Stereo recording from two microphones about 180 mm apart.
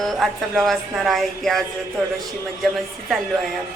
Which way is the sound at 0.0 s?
Centre (ahead or behind).